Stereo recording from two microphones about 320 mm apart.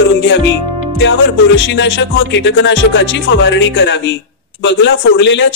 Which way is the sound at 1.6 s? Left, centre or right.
Left.